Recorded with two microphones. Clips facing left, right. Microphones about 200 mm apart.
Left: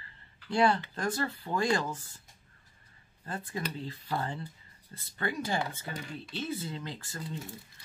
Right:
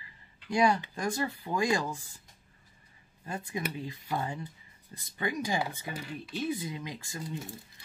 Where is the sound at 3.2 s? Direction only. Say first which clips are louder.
Right 1 dB; 15° right (ahead or behind).